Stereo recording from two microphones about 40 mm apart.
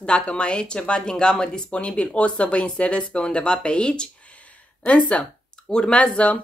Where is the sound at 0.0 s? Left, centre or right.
Left.